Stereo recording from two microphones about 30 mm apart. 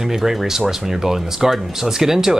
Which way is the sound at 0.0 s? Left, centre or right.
Centre.